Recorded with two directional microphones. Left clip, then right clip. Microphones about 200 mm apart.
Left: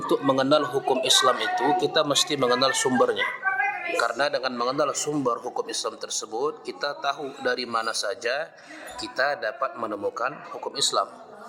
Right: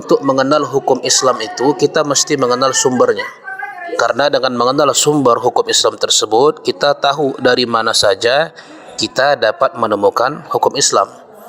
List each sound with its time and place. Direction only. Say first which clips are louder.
0.1 s speech: right 10 dB; 20° right (ahead or behind)
3.9 s a man's voice: right 14 dB; 30° right (ahead or behind)